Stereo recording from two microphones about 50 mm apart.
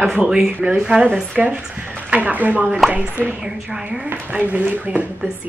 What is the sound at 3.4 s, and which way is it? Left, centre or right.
Speech, centre.